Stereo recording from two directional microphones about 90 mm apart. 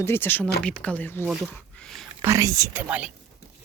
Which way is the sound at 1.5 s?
10° left (ahead or behind).